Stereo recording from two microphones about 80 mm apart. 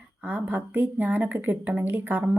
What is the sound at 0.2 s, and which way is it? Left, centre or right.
Speech, centre.